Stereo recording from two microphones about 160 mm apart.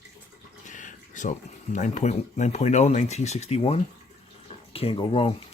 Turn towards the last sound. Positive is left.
turn(degrees=35)  # may be behind; listen again after turning